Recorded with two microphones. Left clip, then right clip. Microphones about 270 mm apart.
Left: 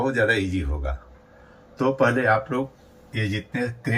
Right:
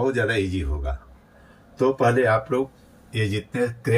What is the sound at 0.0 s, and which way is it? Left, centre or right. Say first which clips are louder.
Speech: left 1 dB; centre.